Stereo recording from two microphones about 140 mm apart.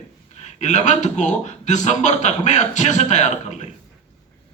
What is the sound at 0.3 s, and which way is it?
A man's voice, 55° left (ahead or behind).